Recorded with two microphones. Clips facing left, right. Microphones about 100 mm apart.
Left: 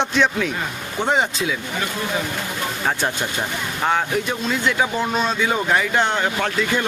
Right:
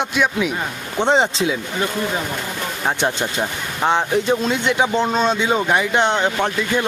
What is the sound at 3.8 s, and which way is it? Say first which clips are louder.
Speech: right 4 dB; 25° right (ahead or behind).